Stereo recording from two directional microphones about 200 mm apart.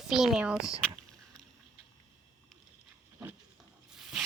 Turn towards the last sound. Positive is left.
turn(degrees=0)  # may be behind; listen again after turning